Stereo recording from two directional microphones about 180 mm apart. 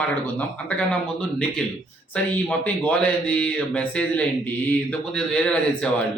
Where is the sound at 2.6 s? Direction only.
10° left (ahead or behind).